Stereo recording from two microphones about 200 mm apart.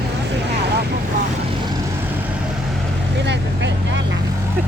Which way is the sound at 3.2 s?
60° right (ahead or behind).